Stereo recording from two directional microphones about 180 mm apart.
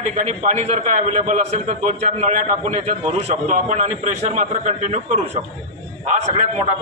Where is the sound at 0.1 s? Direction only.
45° right (ahead or behind).